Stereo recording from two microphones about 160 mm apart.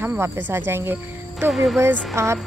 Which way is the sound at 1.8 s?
15° right (ahead or behind).